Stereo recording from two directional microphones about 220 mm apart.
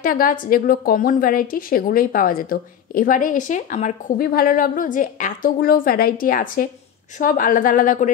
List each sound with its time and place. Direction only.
0.0 s a woman's voice: 40° left (ahead or behind)